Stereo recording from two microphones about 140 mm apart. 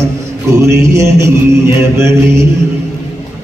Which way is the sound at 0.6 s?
20° right (ahead or behind).